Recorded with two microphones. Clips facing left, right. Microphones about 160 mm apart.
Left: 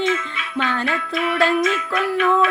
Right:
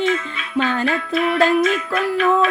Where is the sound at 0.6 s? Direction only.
40° right (ahead or behind).